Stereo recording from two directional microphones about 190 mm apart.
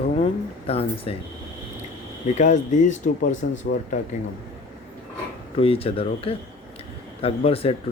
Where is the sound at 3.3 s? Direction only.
80° left.